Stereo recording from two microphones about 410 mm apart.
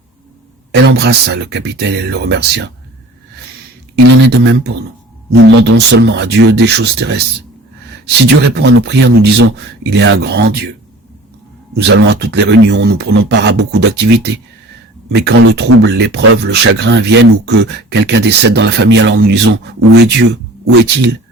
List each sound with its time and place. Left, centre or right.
0.7 s speech: right
4.0 s speech: right
11.8 s speech: right